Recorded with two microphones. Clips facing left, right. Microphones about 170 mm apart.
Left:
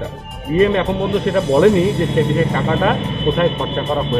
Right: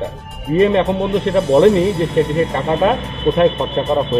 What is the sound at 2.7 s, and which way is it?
Speech, 15° right (ahead or behind).